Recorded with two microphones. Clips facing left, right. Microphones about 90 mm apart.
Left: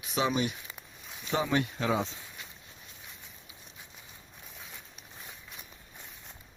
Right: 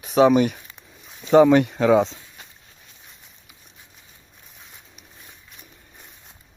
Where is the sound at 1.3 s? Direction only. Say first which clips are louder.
Right 15 dB; 80° right.